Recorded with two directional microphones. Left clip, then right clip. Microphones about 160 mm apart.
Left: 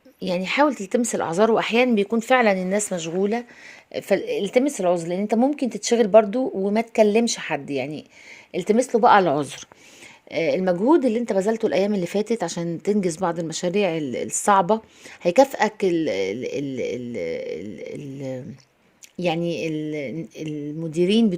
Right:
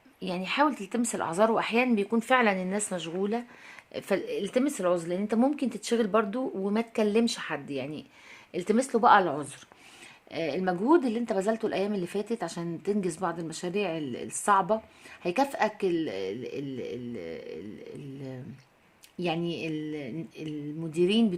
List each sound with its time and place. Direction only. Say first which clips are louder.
0.2 s a woman's voice: left 7 dB; 40° left (ahead or behind)
1.9 s a woman's voice: left 6 dB; 30° left (ahead or behind); by 9.6 s 55° left (ahead or behind)
10.3 s a woman's voice: left 9 dB; 40° left (ahead or behind)